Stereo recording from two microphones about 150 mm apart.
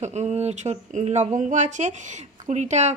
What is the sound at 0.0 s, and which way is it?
Speech, 50° right (ahead or behind).